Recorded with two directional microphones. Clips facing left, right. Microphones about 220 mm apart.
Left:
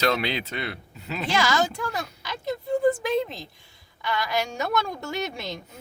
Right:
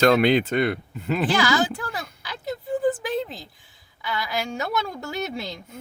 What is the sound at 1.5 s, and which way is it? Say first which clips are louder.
Speech: right 2 dB; 5° right (ahead or behind).